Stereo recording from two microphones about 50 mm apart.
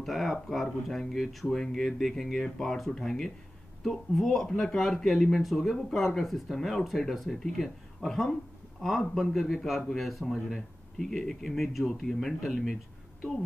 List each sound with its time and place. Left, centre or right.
0.0 s speech: centre